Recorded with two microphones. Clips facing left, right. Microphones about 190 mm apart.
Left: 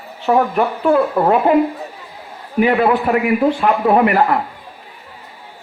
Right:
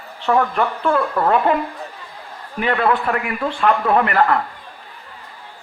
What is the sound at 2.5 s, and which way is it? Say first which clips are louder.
Speech: left 5 dB; 15° left (ahead or behind).